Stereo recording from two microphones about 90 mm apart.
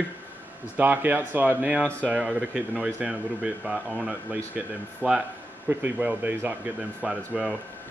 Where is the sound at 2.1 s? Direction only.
10° right (ahead or behind).